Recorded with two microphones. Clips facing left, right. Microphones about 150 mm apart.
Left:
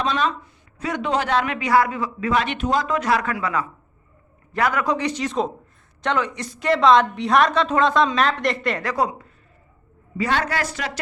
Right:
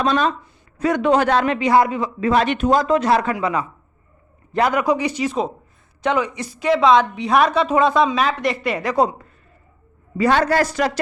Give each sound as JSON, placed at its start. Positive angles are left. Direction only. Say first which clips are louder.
{"t": 0.0, "sound": "a man's voice", "louder": "right 4 dB", "side_deg": -45}
{"t": 1.5, "sound": "speech", "louder": "right 3 dB", "side_deg": -25}
{"t": 2.3, "sound": "speech", "louder": "right 5 dB", "side_deg": -40}
{"t": 2.8, "sound": "a man's voice", "louder": "right 5 dB", "side_deg": -30}
{"t": 10.2, "sound": "speech", "louder": "right 6 dB", "side_deg": -45}